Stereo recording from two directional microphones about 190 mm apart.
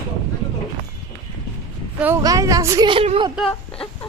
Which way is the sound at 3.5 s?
10° left (ahead or behind).